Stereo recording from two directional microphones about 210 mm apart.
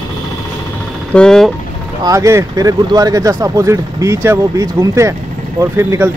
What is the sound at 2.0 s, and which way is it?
Speech, 15° right (ahead or behind).